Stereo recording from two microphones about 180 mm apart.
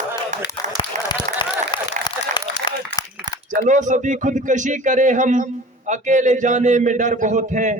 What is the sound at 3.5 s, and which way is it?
Speech, 45° right (ahead or behind).